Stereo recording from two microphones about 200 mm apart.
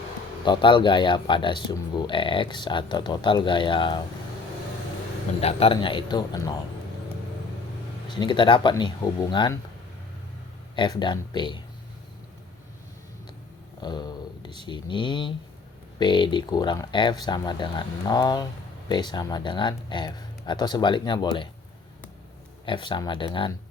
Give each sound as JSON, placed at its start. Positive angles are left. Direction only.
{"t": 0.4, "sound": "speech", "side_deg": 25}
{"t": 5.4, "sound": "speech", "side_deg": 30}
{"t": 8.0, "sound": "speech", "side_deg": 20}
{"t": 10.8, "sound": "speech", "side_deg": 25}
{"t": 13.8, "sound": "a sound", "side_deg": 20}
{"t": 14.6, "sound": "speech", "side_deg": 25}
{"t": 22.6, "sound": "speech", "side_deg": 25}